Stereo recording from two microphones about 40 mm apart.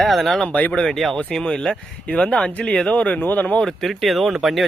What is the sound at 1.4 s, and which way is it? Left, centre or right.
Speech, left.